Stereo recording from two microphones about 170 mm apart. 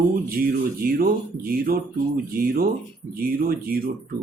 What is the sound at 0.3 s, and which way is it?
Speech, 60° right (ahead or behind).